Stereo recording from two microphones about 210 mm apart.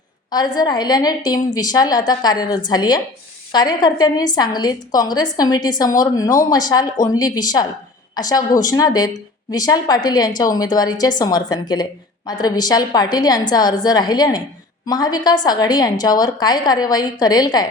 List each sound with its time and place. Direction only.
0.3 s a woman's voice: 20° left (ahead or behind)